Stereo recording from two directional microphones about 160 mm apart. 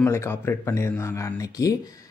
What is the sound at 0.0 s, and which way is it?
A man's voice, 15° left (ahead or behind).